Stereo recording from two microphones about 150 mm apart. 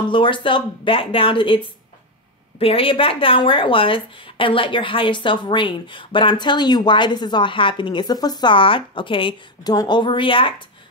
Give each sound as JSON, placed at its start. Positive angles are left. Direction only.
{"t": 0.1, "sound": "a woman's voice", "side_deg": 35}
{"t": 2.6, "sound": "a woman's voice", "side_deg": 40}